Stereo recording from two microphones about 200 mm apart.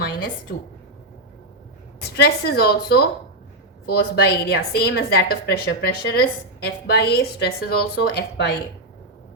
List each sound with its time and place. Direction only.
2.1 s a woman's voice: 55° left (ahead or behind)